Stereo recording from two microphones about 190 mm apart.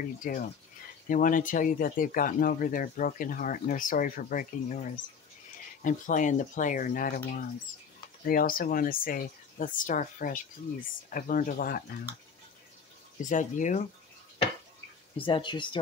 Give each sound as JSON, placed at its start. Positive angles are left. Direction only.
{"t": 0.2, "sound": "speech", "side_deg": 45}
{"t": 5.9, "sound": "speech", "side_deg": 45}
{"t": 13.2, "sound": "speech", "side_deg": 40}
{"t": 15.1, "sound": "speech", "side_deg": 25}